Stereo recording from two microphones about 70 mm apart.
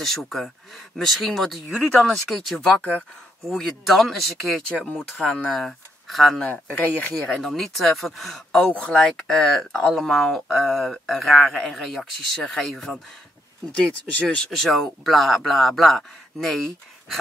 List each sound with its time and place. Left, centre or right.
0.0 s speech: centre
1.9 s speech: centre
2.2 s speech: centre
2.8 s speech: centre
3.4 s speech: centre
6.4 s speech: left
7.2 s speech: centre
8.5 s speech: centre
13.7 s speech: centre